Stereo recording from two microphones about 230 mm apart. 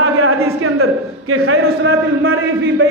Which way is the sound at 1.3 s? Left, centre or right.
Right.